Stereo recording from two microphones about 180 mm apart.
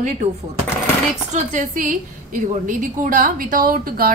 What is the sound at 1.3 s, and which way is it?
A woman's voice, 45° right (ahead or behind).